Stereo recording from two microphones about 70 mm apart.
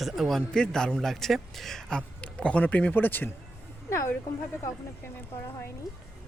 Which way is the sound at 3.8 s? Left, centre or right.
Left.